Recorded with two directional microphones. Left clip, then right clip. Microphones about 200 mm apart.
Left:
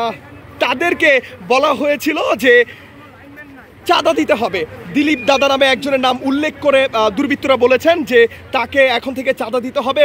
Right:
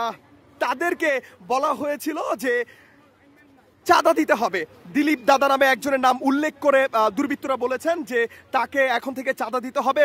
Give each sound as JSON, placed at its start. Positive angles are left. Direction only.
{"t": 0.0, "sound": "a man's voice", "side_deg": -20}
{"t": 3.8, "sound": "a man's voice", "side_deg": -30}